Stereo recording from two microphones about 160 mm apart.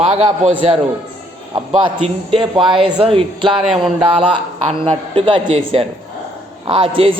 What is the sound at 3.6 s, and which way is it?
Speech, 5° right (ahead or behind).